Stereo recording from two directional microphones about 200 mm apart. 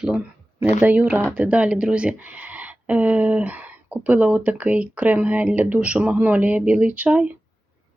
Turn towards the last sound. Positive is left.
turn(degrees=-5)  # may be behind; listen again after turning